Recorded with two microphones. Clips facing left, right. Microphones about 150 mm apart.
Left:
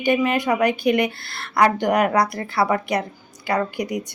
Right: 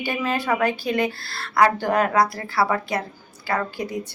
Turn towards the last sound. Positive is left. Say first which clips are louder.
# left 3 dB
turn(degrees=15)  # may be behind; listen again after turning